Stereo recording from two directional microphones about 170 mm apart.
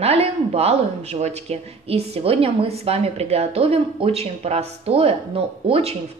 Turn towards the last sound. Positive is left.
turn(degrees=-35)  # may be behind; listen again after turning